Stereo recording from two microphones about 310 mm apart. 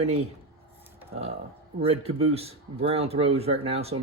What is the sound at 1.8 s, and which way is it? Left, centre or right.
Speech, centre.